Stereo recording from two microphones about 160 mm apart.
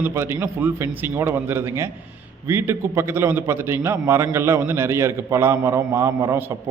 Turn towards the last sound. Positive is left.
turn(degrees=-15)  # may be behind; listen again after turning